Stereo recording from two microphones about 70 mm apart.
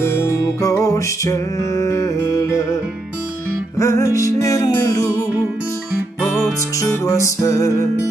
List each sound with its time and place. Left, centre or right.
0.0 s music: left
7.1 s music: left